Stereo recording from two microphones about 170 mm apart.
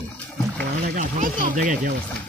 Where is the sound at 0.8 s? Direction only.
50° right (ahead or behind).